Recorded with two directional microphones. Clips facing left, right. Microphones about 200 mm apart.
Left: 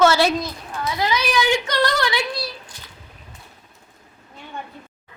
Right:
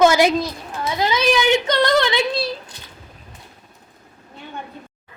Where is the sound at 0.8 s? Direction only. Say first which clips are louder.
Right 3 dB; 25° right (ahead or behind).